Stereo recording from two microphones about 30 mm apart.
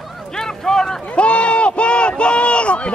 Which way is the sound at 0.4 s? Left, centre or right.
Centre.